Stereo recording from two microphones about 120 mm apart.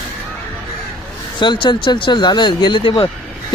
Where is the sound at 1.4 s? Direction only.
40° left (ahead or behind).